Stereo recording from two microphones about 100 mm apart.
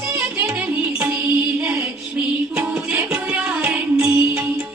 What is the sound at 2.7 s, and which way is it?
Music, 15° right (ahead or behind).